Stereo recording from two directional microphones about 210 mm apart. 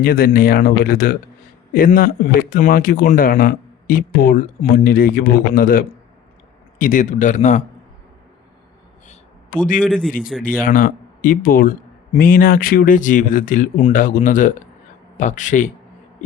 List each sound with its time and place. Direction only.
0.0 s speech: 45° left (ahead or behind)
9.6 s speech: 40° left (ahead or behind)